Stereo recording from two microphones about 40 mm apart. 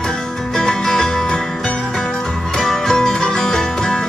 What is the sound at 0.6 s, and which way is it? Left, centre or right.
Music, centre.